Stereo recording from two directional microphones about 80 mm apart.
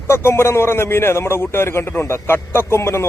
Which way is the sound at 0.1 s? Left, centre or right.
Left.